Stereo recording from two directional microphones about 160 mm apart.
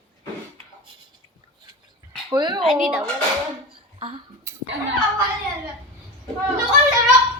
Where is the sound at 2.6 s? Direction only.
5° right (ahead or behind).